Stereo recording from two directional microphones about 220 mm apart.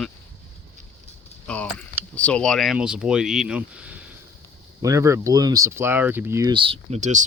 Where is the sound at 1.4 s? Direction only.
5° left (ahead or behind).